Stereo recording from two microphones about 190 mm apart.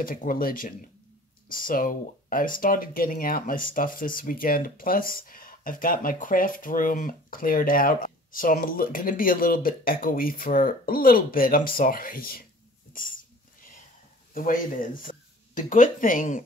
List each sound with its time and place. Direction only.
0.0 s speech: 45° left (ahead or behind)
12.9 s a sound: 45° left (ahead or behind)
14.3 s speech: 45° left (ahead or behind)